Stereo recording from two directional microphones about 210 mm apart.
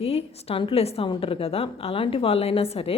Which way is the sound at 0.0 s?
25° left (ahead or behind).